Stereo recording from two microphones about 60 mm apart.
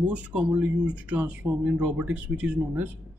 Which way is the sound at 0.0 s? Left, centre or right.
Right.